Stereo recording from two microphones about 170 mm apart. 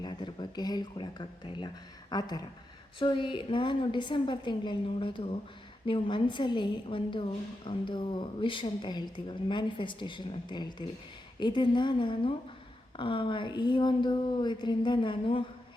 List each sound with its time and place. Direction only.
0.0 s a woman's voice: 25° left (ahead or behind)